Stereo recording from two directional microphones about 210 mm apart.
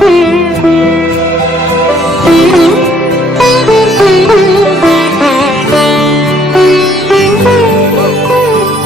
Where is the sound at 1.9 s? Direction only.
Centre (ahead or behind).